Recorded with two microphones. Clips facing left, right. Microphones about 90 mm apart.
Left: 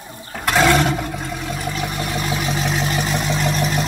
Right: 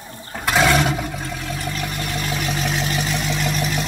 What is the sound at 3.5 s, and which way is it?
Vehicle, 35° left (ahead or behind).